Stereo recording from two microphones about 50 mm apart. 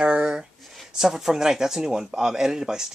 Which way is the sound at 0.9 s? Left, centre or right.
Centre.